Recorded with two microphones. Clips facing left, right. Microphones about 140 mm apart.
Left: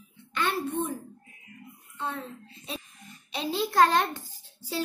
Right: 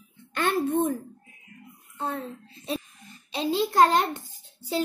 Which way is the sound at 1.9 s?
35° right (ahead or behind).